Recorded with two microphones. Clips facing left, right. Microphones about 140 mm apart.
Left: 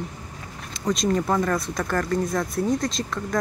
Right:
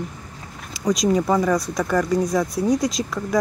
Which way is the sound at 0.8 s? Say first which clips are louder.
Right 4 dB; centre (ahead or behind).